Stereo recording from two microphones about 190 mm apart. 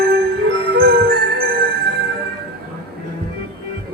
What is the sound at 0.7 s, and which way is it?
Music, 55° right (ahead or behind).